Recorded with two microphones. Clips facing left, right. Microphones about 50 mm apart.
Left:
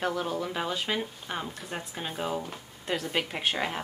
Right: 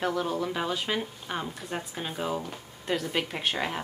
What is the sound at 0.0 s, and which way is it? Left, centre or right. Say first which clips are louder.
A woman's voice: right 2 dB; centre.